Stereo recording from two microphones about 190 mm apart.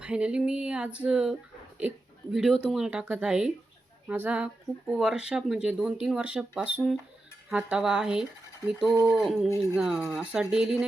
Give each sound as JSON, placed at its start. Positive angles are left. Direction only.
{"t": 0.0, "sound": "speech", "side_deg": -5}
{"t": 8.9, "sound": "speech", "side_deg": -15}
{"t": 9.1, "sound": "speech", "side_deg": 0}